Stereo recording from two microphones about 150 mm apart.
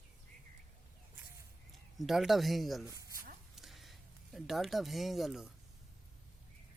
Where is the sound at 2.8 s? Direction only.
25° right (ahead or behind).